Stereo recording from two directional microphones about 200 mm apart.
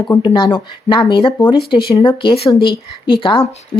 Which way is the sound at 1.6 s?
50° left (ahead or behind).